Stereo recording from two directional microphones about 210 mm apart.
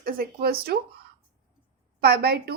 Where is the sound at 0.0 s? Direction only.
45° right (ahead or behind).